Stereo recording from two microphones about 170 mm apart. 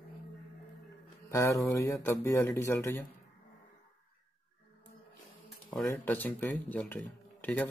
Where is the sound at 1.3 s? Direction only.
15° left (ahead or behind).